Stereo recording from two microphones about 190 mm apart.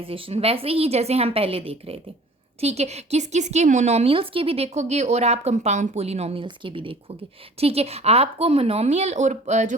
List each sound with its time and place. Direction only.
0.0 s speech: 30° right (ahead or behind)